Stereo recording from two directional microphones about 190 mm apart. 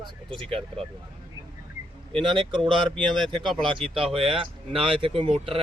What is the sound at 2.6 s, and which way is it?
Speech, centre (ahead or behind).